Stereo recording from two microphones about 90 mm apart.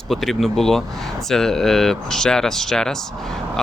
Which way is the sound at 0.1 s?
Centre (ahead or behind).